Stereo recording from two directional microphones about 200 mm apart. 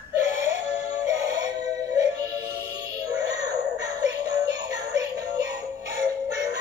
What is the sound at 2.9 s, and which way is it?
Synthetic singing, 20° right (ahead or behind).